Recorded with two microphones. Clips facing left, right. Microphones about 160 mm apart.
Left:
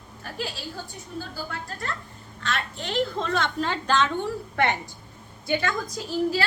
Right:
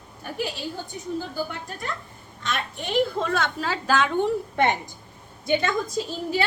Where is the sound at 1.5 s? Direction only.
15° right (ahead or behind).